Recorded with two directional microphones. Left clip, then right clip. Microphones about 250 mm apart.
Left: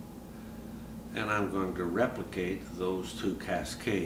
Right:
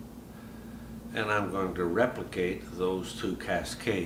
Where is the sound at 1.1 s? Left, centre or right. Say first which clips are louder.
Right 2 dB; right.